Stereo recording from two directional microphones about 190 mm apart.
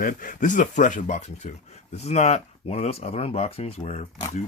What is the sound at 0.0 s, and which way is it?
Speech, 45° left (ahead or behind).